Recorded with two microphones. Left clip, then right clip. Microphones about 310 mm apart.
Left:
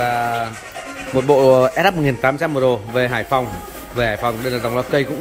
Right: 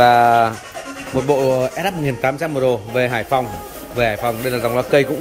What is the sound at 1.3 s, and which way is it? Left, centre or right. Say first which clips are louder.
Speech: left 5 dB; centre.